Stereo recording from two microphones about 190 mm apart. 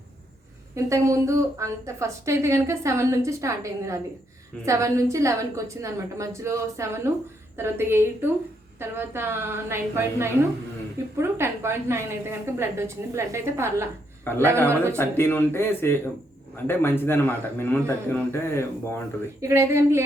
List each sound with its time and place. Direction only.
0.8 s a woman's voice: 15° right (ahead or behind)
14.3 s a man's voice: 10° left (ahead or behind)
19.4 s a woman's voice: 15° right (ahead or behind)